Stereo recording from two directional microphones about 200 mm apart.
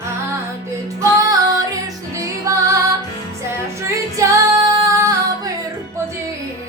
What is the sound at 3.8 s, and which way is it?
Music, 15° right (ahead or behind).